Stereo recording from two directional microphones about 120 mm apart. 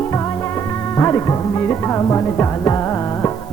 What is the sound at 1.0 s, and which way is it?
Music, 25° left (ahead or behind).